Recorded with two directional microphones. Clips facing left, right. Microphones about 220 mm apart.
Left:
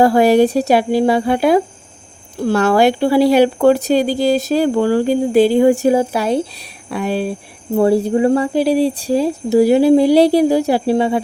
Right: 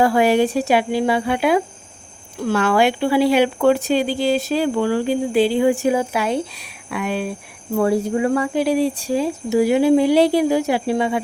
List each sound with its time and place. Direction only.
0.0 s speech: 40° left (ahead or behind)